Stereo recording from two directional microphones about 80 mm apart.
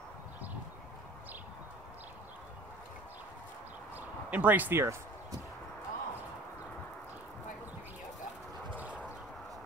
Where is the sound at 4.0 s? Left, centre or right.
Centre.